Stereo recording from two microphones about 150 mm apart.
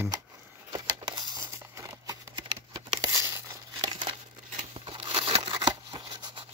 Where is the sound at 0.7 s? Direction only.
30° right (ahead or behind).